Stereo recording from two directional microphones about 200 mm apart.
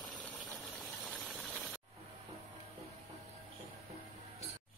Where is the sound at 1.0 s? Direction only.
Centre (ahead or behind).